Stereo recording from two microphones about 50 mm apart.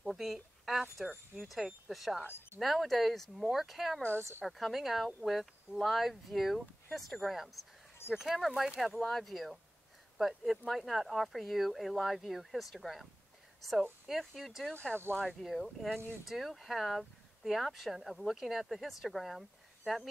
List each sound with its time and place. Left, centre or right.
0.0 s a woman's voice: centre
14.7 s speech: left
15.2 s speech: centre